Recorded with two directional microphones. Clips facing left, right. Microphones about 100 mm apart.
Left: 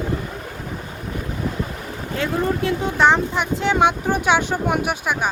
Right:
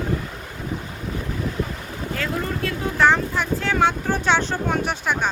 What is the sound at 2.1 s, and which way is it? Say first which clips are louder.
Speech: left 5 dB; 20° left (ahead or behind).